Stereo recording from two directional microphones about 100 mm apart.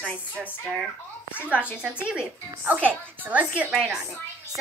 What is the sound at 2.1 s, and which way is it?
A child's voice, 10° right (ahead or behind).